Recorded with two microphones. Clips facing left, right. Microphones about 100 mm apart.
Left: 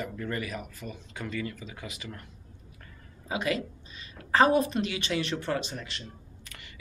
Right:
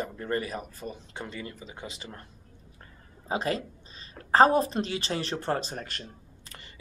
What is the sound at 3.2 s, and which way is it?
Speech, 35° right (ahead or behind).